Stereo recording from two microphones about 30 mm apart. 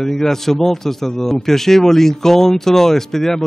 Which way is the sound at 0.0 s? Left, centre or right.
Centre.